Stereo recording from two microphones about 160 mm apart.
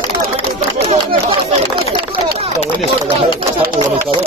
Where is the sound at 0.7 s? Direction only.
40° right (ahead or behind).